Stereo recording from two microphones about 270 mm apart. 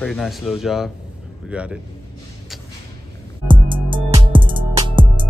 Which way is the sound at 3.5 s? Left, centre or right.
Centre.